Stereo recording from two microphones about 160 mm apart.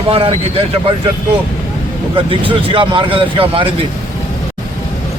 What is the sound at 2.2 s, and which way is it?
Speech, 30° right (ahead or behind).